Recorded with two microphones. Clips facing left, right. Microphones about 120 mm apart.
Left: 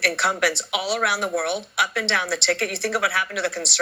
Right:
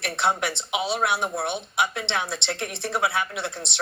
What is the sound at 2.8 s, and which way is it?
Speech, 20° right (ahead or behind).